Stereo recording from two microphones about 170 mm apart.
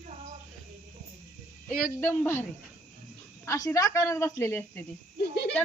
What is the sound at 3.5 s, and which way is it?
Speech, 20° left (ahead or behind).